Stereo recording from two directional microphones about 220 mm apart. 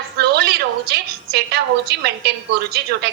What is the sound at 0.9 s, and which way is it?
A woman's voice, 45° right (ahead or behind).